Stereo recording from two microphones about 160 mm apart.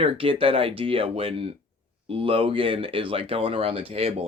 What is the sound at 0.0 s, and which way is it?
Speech, 35° right (ahead or behind).